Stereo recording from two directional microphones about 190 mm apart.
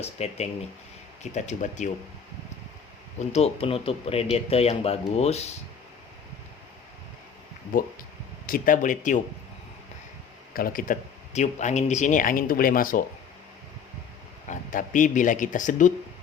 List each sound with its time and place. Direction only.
0.0 s speech: 35° left (ahead or behind)
3.2 s speech: 35° left (ahead or behind)
7.7 s speech: 45° left (ahead or behind)
10.5 s speech: 50° left (ahead or behind)
11.3 s speech: 35° left (ahead or behind)
14.5 s speech: 40° left (ahead or behind)